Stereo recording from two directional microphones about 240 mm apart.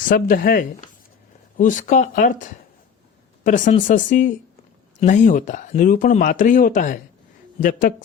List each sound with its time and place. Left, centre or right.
0.1 s speech: left